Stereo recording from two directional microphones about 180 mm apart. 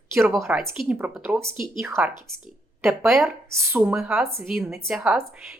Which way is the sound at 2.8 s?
Centre (ahead or behind).